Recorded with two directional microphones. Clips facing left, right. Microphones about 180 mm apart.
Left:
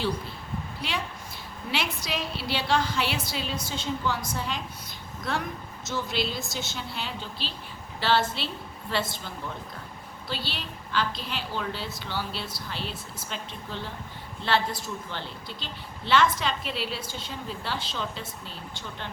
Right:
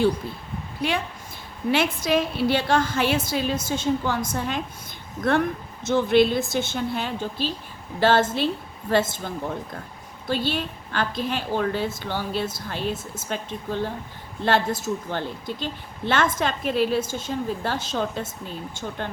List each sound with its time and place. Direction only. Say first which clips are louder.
0.8 s a woman's voice: right 10 dB; 50° right (ahead or behind)